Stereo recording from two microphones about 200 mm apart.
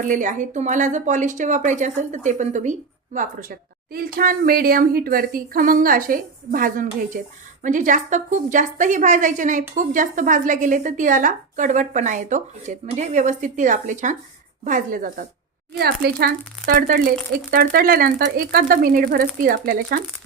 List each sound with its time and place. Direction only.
0.0 s speech: 40° right (ahead or behind)